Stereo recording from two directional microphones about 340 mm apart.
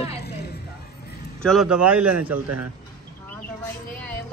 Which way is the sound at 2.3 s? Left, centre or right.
Right.